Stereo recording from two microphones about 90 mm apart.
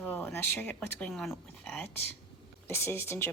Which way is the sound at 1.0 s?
5° left (ahead or behind).